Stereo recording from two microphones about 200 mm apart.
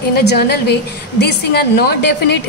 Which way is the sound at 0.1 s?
55° left (ahead or behind).